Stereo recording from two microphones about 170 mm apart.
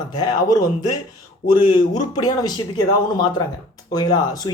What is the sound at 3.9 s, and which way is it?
Speech, 20° left (ahead or behind).